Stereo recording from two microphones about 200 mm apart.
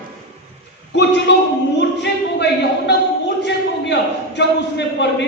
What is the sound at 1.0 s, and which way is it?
A man's voice, 60° left (ahead or behind).